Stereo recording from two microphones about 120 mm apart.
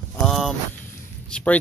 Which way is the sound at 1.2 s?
10° left (ahead or behind).